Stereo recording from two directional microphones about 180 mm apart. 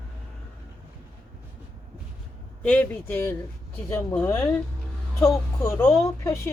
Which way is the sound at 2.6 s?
10° left (ahead or behind).